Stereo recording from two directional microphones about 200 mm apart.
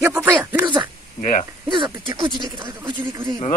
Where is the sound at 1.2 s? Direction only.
40° left (ahead or behind).